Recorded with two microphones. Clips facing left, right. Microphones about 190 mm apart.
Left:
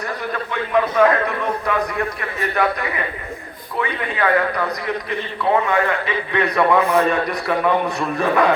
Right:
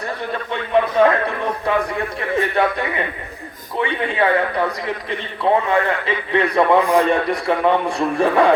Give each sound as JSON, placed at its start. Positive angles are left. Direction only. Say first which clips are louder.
{"t": 0.5, "sound": "a man's voice", "louder": "right 1 dB", "side_deg": -30}